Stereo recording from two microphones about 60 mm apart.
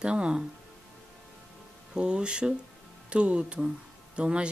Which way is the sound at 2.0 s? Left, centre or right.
Centre.